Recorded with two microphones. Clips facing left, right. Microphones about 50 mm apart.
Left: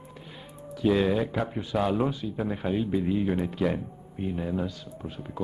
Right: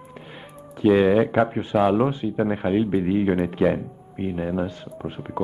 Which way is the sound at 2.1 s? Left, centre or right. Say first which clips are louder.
Right 7 dB; right.